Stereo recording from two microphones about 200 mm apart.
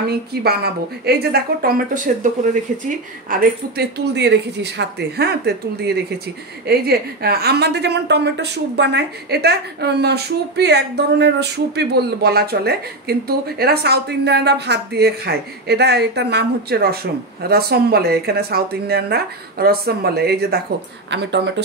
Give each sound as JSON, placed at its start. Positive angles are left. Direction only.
{"t": 0.1, "sound": "a woman's voice", "side_deg": -50}
{"t": 3.3, "sound": "a woman's voice", "side_deg": -50}